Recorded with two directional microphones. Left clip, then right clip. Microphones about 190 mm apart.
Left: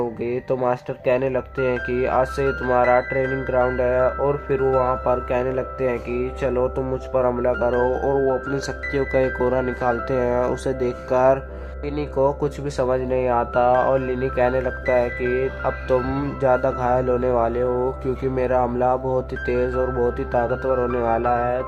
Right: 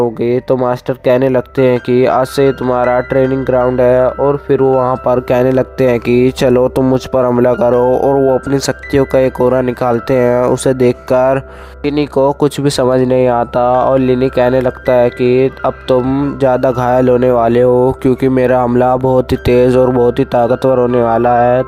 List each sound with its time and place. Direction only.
0.0 s speech: 45° right (ahead or behind)
16.0 s speech: 30° right (ahead or behind)
16.5 s speech: 45° right (ahead or behind)